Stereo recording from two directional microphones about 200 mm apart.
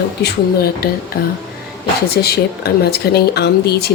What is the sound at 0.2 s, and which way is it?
Speech, 50° left (ahead or behind).